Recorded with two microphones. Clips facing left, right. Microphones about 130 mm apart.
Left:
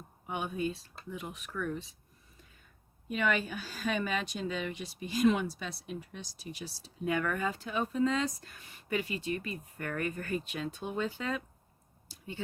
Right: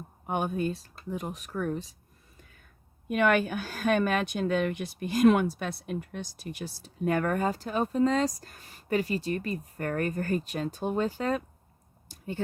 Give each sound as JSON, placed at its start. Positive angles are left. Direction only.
{"t": 0.3, "sound": "speech", "side_deg": -50}
{"t": 3.1, "sound": "speech", "side_deg": -60}
{"t": 12.0, "sound": "a sound", "side_deg": -45}